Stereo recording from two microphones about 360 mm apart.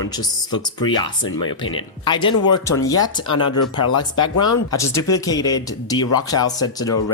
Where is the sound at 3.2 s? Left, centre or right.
Left.